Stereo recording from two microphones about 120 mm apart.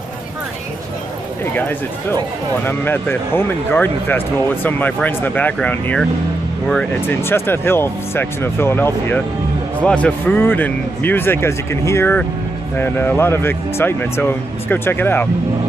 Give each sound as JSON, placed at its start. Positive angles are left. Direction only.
{"t": 1.4, "sound": "speech", "side_deg": 15}
{"t": 7.1, "sound": "speech", "side_deg": 20}